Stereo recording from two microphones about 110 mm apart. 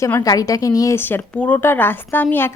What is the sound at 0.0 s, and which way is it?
Speech, 30° left (ahead or behind).